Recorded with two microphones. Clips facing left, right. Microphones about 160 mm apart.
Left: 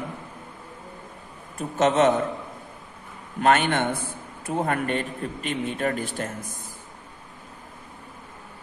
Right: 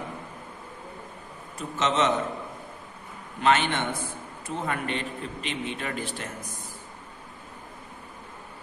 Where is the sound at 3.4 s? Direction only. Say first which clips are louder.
Left 3 dB; 50° left (ahead or behind).